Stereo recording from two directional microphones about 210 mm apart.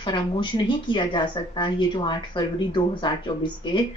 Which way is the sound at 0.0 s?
20° left (ahead or behind).